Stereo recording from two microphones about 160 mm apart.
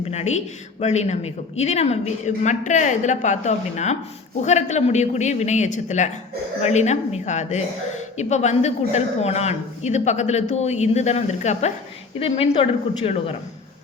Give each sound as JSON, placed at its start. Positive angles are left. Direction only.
{"t": 0.0, "sound": "a woman's voice", "side_deg": 40}